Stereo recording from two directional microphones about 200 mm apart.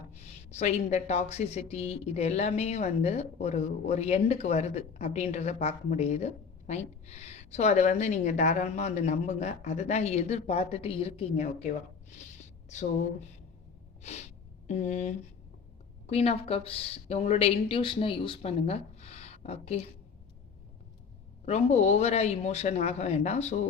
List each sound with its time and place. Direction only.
0.2 s a woman's voice: 35° left (ahead or behind)
14.0 s snort: 35° left (ahead or behind)
14.7 s a woman's voice: 35° left (ahead or behind)
21.4 s a woman's voice: 35° left (ahead or behind)